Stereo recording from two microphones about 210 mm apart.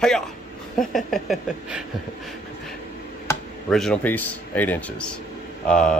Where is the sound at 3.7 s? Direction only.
Centre (ahead or behind).